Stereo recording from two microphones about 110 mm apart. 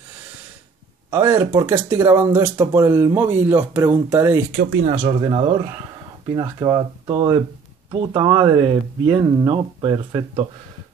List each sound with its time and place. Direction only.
1.1 s speech: 30° right (ahead or behind)
4.5 s speech: 75° right (ahead or behind)
5.3 s speech: 50° right (ahead or behind)
6.2 s speech: 40° right (ahead or behind)